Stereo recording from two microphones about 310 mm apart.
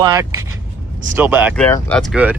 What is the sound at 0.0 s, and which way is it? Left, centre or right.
A man's voice, centre.